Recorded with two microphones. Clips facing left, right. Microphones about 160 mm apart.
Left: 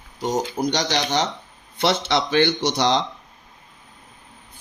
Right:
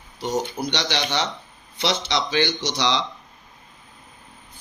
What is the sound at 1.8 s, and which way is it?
Speech, 55° left (ahead or behind).